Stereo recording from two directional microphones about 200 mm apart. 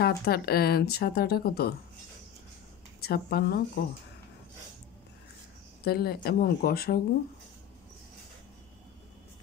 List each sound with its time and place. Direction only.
0.0 s speech: 50° left (ahead or behind)
3.0 s speech: 50° left (ahead or behind)
5.9 s speech: 50° left (ahead or behind)